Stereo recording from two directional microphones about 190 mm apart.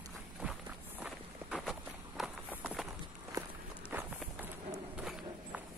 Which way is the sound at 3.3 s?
20° right (ahead or behind).